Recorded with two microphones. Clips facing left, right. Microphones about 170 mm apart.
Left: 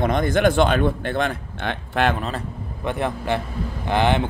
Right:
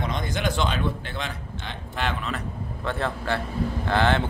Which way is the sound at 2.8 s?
15° left (ahead or behind).